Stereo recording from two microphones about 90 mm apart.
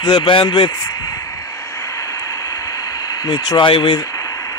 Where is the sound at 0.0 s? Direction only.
65° left (ahead or behind).